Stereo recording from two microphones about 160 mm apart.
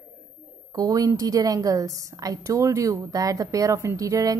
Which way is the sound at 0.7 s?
20° right (ahead or behind).